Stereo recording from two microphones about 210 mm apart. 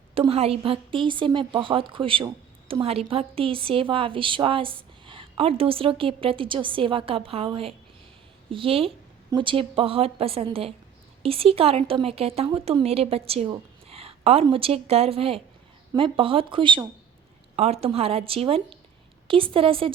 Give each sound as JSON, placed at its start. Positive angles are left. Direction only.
{"t": 0.1, "sound": "a woman's voice", "side_deg": -25}